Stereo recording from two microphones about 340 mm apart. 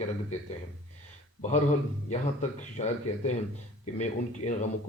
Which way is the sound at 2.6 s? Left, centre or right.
Centre.